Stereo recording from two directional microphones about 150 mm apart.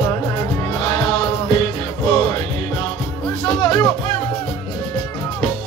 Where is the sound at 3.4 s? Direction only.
30° left (ahead or behind).